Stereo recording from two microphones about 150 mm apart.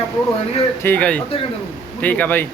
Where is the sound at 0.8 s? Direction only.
10° left (ahead or behind).